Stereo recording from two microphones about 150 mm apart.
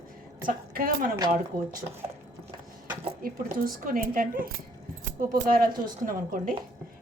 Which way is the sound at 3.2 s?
65° right (ahead or behind).